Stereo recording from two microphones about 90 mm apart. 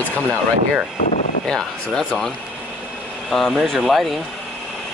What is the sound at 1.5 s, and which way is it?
Speech, 5° left (ahead or behind).